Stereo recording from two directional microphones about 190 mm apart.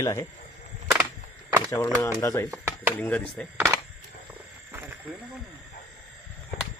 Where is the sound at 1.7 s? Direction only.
15° left (ahead or behind).